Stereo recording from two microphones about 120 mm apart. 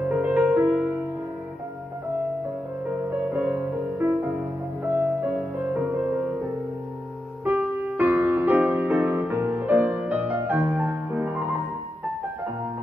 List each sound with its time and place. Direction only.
0.1 s music: 10° right (ahead or behind)
3.1 s music: 10° right (ahead or behind)
4.8 s music: 20° right (ahead or behind)
5.3 s music: 10° right (ahead or behind)
7.4 s music: 15° right (ahead or behind)